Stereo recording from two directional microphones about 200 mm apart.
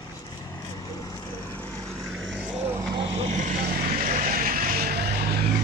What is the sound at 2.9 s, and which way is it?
Vehicle, 30° right (ahead or behind).